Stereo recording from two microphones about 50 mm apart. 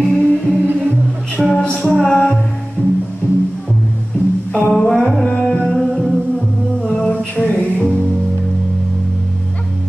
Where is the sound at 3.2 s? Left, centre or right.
Left.